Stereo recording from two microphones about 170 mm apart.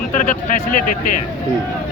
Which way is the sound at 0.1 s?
45° left (ahead or behind).